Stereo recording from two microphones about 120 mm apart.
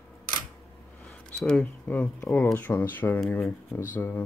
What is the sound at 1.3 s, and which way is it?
Speech, 5° left (ahead or behind).